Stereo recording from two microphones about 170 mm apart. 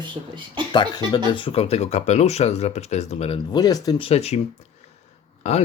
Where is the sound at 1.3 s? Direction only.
35° left (ahead or behind).